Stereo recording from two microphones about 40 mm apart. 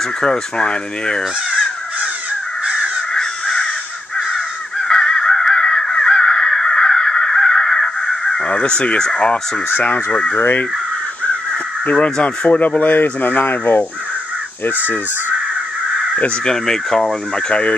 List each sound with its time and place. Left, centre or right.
0.2 s speech: left
3.2 s crow: centre
8.5 s speech: left
10.3 s speech: left
11.8 s speech: left
12.4 s speech: left
16.4 s speech: centre